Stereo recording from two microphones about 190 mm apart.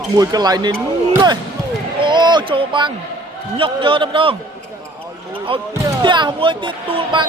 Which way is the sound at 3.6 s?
25° right (ahead or behind).